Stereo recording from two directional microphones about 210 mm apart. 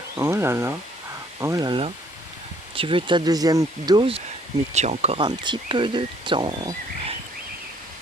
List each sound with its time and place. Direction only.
0.2 s speech: 10° right (ahead or behind)
4.7 s speech: 35° right (ahead or behind)